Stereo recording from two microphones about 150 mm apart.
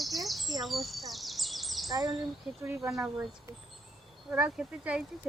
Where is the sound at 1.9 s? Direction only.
25° right (ahead or behind).